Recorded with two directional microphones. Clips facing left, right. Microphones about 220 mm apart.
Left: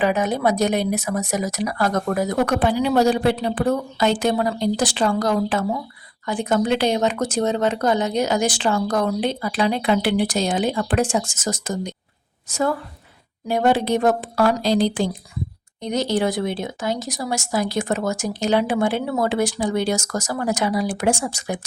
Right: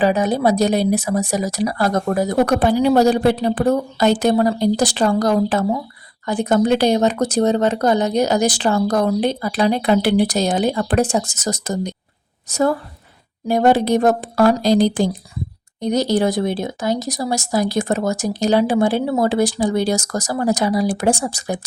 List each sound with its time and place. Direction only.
0.0 s speech: 35° right (ahead or behind)